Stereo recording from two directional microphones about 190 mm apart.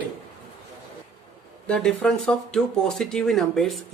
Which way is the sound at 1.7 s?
5° left (ahead or behind).